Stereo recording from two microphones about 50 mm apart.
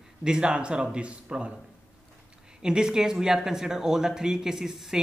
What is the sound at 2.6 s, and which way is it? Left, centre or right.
Speech, centre.